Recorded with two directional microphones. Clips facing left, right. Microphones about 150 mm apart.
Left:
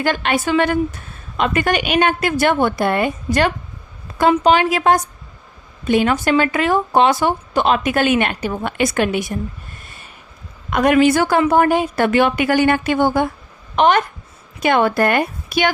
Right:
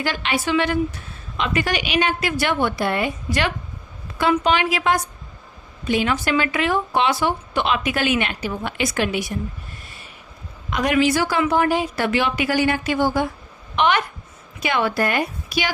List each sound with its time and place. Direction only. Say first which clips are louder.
0.0 s speech: left 5 dB; 50° left (ahead or behind)
4.4 s speech: left 5 dB; 45° left (ahead or behind)
10.7 s speech: left 5 dB; 55° left (ahead or behind)
13.7 s speech: left 5 dB; 45° left (ahead or behind)